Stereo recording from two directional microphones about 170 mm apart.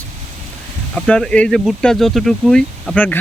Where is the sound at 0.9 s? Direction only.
5° left (ahead or behind).